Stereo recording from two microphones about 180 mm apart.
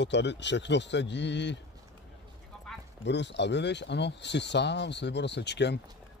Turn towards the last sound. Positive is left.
turn(degrees=70)  # may be behind; listen again after turning